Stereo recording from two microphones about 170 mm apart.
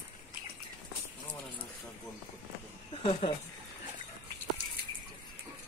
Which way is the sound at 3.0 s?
35° left (ahead or behind).